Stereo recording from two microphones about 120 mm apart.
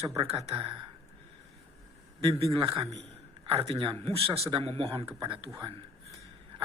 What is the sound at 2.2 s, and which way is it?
Speech, 50° right (ahead or behind).